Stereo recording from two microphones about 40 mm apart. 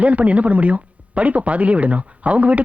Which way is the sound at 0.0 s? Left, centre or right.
Right.